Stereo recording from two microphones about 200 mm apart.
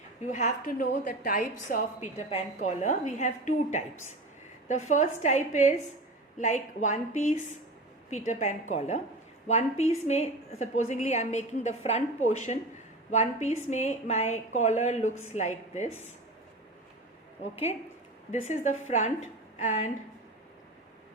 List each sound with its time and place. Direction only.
0.3 s a woman's voice: 40° left (ahead or behind)
17.4 s a woman's voice: 30° left (ahead or behind)